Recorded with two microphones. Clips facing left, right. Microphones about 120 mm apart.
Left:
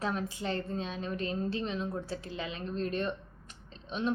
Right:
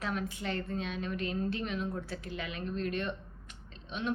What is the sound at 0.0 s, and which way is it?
A woman's voice, 35° left (ahead or behind).